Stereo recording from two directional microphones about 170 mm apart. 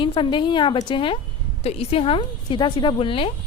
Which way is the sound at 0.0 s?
30° left (ahead or behind).